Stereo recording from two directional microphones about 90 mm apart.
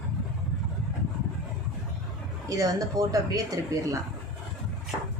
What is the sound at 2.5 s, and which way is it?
Speech, 40° right (ahead or behind).